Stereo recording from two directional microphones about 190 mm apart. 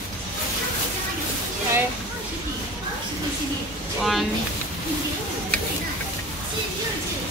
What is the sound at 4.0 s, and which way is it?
Speech, centre (ahead or behind).